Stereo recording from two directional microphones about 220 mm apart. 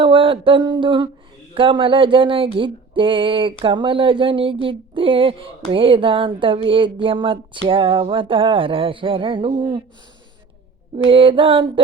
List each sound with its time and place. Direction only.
0.0 s a sound: 25° right (ahead or behind)
1.5 s speech: 25° right (ahead or behind)
11.1 s speech: 25° right (ahead or behind)